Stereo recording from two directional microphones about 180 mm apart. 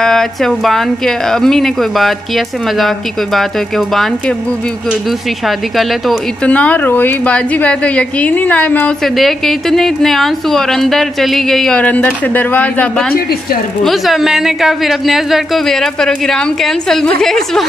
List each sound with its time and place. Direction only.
0.0 s speech: centre (ahead or behind)
5.8 s speech: 5° left (ahead or behind)
13.1 s a woman's voice: 60° left (ahead or behind)
13.8 s speech: centre (ahead or behind)